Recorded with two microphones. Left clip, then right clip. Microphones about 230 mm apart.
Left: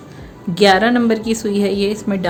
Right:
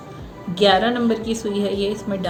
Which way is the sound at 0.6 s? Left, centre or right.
Left.